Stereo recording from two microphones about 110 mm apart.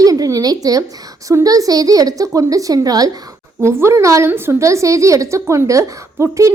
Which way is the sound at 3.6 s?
25° right (ahead or behind).